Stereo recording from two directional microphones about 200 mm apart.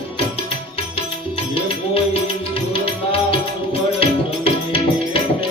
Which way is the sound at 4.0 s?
30° left (ahead or behind).